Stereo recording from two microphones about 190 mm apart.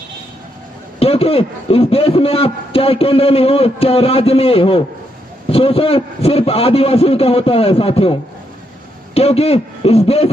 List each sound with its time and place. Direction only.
0.9 s a man's voice: 30° left (ahead or behind)